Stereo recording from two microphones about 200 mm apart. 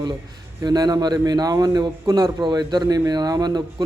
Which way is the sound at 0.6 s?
20° right (ahead or behind).